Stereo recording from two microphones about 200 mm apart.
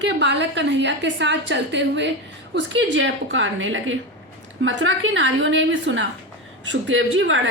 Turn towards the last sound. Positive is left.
turn(degrees=-70)  # may be behind; listen again after turning